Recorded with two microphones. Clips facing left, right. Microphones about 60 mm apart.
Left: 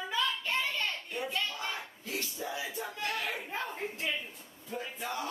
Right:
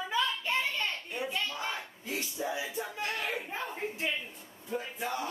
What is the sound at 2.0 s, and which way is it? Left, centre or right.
Music, centre.